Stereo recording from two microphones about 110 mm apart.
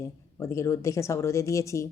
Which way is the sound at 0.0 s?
25° left (ahead or behind).